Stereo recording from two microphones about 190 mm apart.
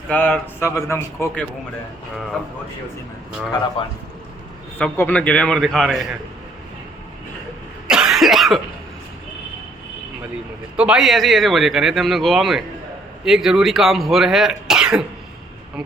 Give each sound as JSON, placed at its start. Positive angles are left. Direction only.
{"t": 0.1, "sound": "a man's voice", "side_deg": 10}
{"t": 3.8, "sound": "a man's voice", "side_deg": 25}
{"t": 4.8, "sound": "a man's voice", "side_deg": 10}
{"t": 7.9, "sound": "cough", "side_deg": -5}
{"t": 10.8, "sound": "a man's voice", "side_deg": -5}